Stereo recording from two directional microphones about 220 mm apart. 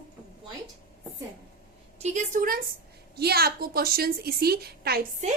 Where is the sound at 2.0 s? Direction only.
35° right (ahead or behind).